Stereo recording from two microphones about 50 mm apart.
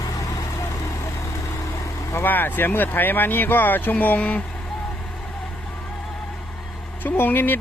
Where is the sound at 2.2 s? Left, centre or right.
Left.